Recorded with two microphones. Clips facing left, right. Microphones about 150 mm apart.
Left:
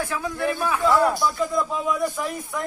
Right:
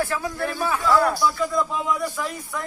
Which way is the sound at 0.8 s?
20° left (ahead or behind).